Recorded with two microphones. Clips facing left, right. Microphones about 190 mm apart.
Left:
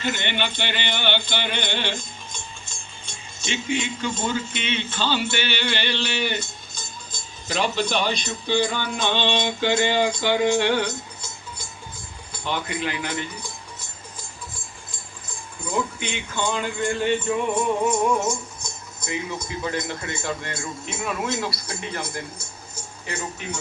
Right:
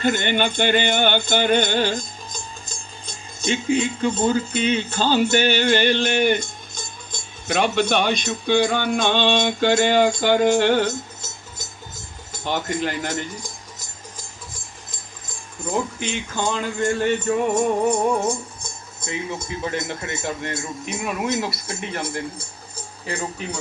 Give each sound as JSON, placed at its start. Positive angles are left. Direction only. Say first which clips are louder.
{"t": 0.0, "sound": "rattle", "louder": "right 6 dB", "side_deg": -45}
{"t": 12.5, "sound": "speech", "louder": "right 3 dB", "side_deg": -45}
{"t": 16.6, "sound": "music", "louder": "right 3 dB", "side_deg": -40}
{"t": 19.0, "sound": "a man's voice", "louder": "right 1 dB", "side_deg": -25}